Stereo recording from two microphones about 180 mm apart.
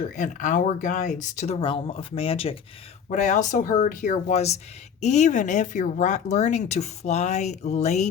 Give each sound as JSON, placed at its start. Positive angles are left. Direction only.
{"t": 0.0, "sound": "speech", "side_deg": 45}